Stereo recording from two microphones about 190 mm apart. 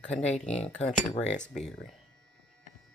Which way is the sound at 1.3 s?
35° left (ahead or behind).